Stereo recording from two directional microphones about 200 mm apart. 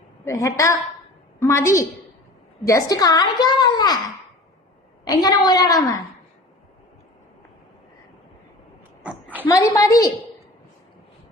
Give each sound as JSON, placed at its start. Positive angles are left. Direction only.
{"t": 0.3, "sound": "a woman's voice", "side_deg": 15}
{"t": 5.2, "sound": "a woman's voice", "side_deg": 20}
{"t": 9.0, "sound": "a sound", "side_deg": -10}
{"t": 9.5, "sound": "a woman's voice", "side_deg": 15}